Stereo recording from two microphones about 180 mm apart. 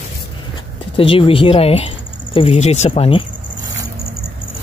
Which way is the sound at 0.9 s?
30° left (ahead or behind).